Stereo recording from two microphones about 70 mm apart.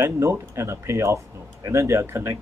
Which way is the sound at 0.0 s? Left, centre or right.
Right.